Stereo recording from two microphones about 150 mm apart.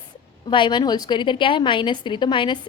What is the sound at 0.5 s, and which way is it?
A woman's voice, 30° left (ahead or behind).